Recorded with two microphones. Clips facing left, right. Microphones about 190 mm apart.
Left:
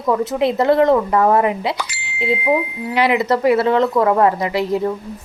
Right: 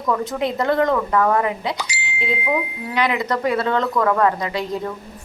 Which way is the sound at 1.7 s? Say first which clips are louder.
Left 1 dB; 55° left (ahead or behind).